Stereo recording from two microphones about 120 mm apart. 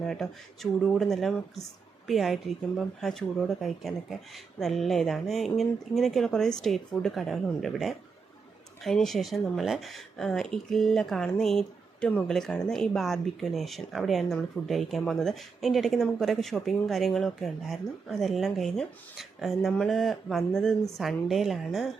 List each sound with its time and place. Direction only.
0.0 s speech: 5° left (ahead or behind)